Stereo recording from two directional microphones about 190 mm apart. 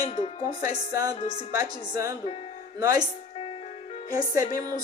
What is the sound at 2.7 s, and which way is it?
Speech, 20° right (ahead or behind).